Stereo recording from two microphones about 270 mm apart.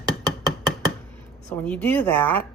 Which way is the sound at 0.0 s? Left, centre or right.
Centre.